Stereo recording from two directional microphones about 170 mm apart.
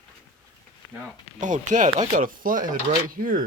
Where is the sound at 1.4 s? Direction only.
50° right (ahead or behind).